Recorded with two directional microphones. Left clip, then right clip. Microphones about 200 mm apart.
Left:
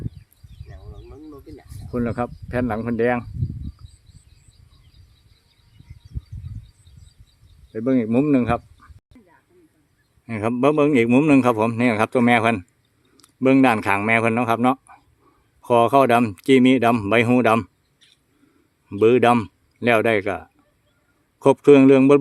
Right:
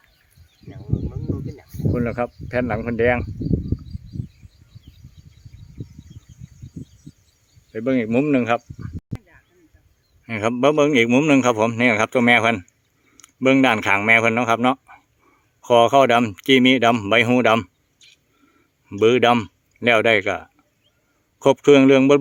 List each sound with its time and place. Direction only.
0.7 s a sound: 35° left (ahead or behind)
1.9 s a man's voice: centre (ahead or behind)
7.7 s speech: centre (ahead or behind)
10.2 s a man's voice: 5° left (ahead or behind)
18.9 s a man's voice: centre (ahead or behind)